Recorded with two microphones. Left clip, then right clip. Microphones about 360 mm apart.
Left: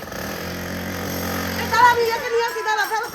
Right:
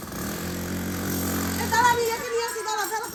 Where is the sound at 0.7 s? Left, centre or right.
Centre.